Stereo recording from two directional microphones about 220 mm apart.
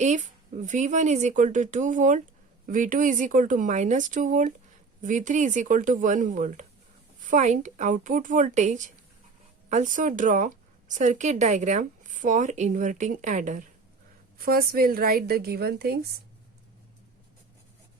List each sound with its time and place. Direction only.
0.0 s a woman's voice: 30° right (ahead or behind)